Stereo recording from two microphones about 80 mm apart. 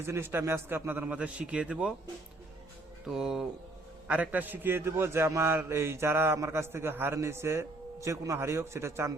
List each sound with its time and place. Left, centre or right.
0.0 s a man's voice: right; by 1.9 s centre
3.1 s speech: centre
4.1 s a man's voice: centre; by 9.1 s right